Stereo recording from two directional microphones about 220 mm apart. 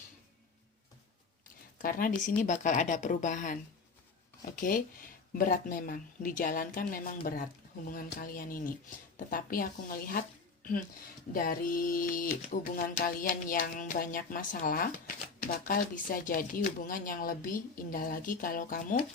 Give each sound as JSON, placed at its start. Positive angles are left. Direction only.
{"t": 1.8, "sound": "speech", "side_deg": 40}
{"t": 11.3, "sound": "speech", "side_deg": 40}